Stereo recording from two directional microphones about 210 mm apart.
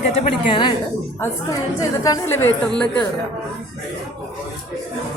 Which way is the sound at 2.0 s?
15° left (ahead or behind).